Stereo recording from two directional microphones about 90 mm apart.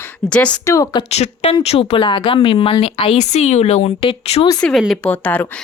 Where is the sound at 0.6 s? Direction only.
35° left (ahead or behind).